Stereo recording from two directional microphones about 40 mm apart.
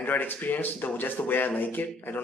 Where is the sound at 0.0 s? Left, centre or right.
Left.